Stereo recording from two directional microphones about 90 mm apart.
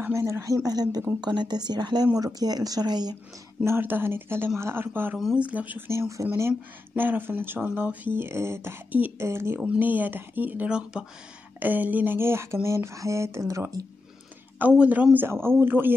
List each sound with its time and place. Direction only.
0.0 s speech: 35° right (ahead or behind); by 3.2 s 50° right (ahead or behind)
3.6 s speech: 25° right (ahead or behind)
5.9 s speech: 35° right (ahead or behind)
7.0 s speech: 20° right (ahead or behind); by 13.8 s 40° right (ahead or behind)
14.6 s speech: 15° right (ahead or behind)